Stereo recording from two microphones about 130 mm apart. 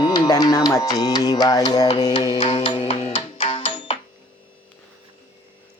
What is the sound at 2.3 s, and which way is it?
Music, 45° left (ahead or behind).